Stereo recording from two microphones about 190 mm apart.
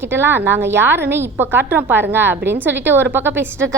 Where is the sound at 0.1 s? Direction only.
10° right (ahead or behind).